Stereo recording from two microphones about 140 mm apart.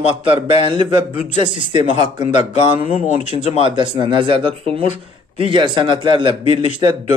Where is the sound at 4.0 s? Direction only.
35° right (ahead or behind).